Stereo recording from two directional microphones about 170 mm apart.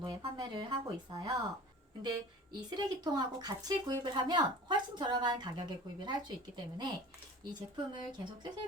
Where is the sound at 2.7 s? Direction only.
25° right (ahead or behind).